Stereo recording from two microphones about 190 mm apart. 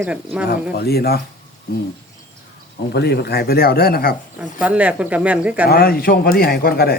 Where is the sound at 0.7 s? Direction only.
55° left (ahead or behind).